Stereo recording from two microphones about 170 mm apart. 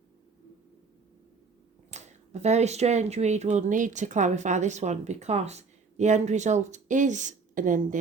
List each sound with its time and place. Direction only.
1.9 s speech: 40° right (ahead or behind)